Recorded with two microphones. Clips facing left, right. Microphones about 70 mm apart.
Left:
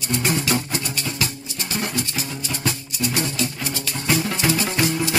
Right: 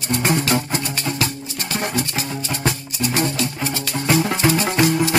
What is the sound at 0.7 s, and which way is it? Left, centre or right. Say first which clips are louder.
Music: right 3 dB; right.